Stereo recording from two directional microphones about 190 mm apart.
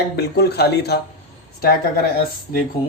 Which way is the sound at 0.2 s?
60° left (ahead or behind).